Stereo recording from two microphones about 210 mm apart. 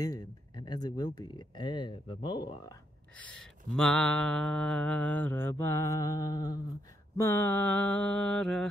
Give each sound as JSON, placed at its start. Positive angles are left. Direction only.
{"t": 0.0, "sound": "speech", "side_deg": 20}
{"t": 3.2, "sound": "mantra", "side_deg": 5}